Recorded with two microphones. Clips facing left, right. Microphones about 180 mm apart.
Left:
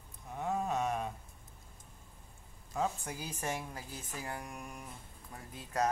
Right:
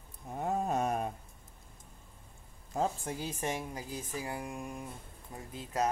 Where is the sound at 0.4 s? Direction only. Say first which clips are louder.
Right 2 dB; 40° right (ahead or behind).